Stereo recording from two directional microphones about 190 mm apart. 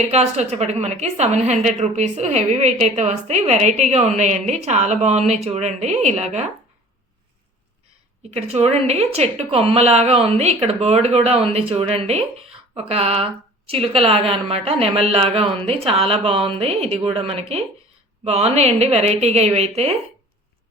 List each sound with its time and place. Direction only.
0.1 s a woman's voice: 35° right (ahead or behind)
8.3 s a woman's voice: 35° right (ahead or behind)